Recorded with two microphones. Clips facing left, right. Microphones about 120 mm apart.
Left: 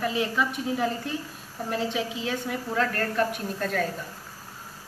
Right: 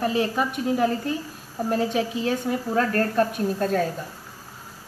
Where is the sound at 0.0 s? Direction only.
40° right (ahead or behind).